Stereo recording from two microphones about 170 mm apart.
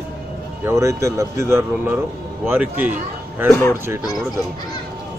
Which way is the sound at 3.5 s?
15° left (ahead or behind).